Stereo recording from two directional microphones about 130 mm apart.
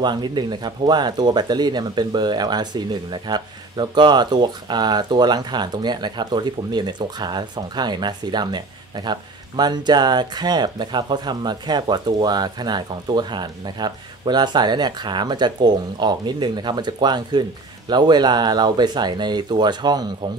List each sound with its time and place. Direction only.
0.0 s speech: 35° right (ahead or behind)